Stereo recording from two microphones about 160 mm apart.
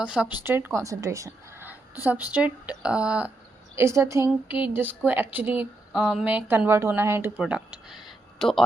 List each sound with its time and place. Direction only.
0.0 s a woman's voice: 5° right (ahead or behind)
3.8 s speech: 15° right (ahead or behind); by 8.6 s centre (ahead or behind)